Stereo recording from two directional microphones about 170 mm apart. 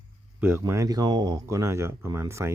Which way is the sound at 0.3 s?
15° right (ahead or behind).